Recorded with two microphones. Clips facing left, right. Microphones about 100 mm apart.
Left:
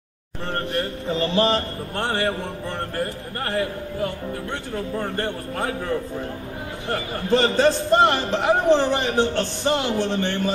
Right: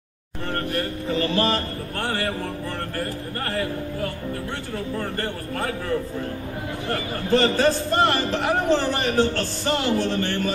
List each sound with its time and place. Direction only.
0.5 s a man's voice: 25° left (ahead or behind)
3.4 s a man's voice: 15° left (ahead or behind)